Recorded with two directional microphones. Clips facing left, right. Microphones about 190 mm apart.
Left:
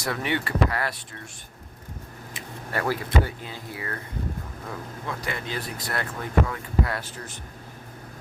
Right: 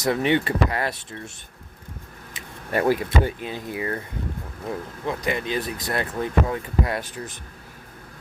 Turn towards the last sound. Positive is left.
turn(degrees=-15)  # may be behind; listen again after turning